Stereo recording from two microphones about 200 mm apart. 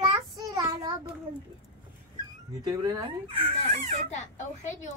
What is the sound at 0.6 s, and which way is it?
Child singing, 20° right (ahead or behind).